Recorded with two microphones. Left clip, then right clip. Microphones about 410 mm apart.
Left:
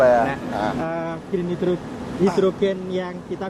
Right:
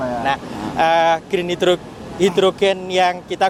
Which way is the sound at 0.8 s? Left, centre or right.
Right.